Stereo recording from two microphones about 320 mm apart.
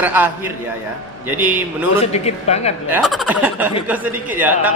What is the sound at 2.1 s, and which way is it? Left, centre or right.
Speech, centre.